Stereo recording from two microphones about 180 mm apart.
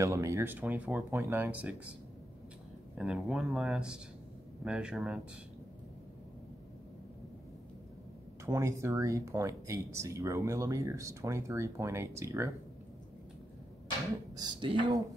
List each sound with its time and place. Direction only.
0.0 s speech: 15° right (ahead or behind)
3.0 s speech: centre (ahead or behind)
8.5 s speech: 15° right (ahead or behind)
14.3 s speech: 25° right (ahead or behind)